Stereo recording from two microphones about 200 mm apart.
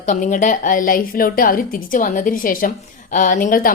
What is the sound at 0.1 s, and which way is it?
A woman's voice, 40° left (ahead or behind).